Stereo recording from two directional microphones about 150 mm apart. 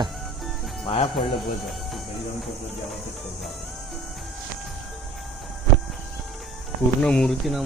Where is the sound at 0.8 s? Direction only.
40° left (ahead or behind).